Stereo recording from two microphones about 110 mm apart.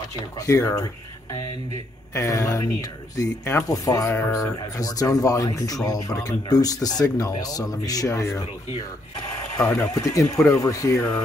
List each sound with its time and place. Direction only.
0.4 s speech: 30° left (ahead or behind)
9.8 s speech: 30° left (ahead or behind)